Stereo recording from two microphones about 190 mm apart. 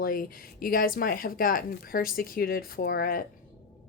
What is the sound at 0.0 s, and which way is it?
Speech, 50° left (ahead or behind).